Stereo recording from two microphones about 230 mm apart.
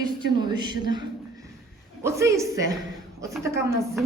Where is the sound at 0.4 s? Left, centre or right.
Centre.